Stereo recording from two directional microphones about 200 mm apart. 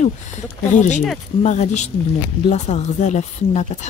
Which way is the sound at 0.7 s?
35° left (ahead or behind).